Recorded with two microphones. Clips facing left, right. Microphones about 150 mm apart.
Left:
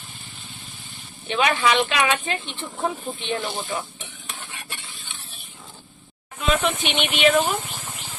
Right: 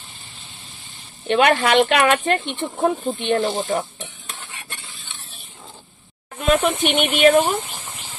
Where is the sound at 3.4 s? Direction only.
40° right (ahead or behind).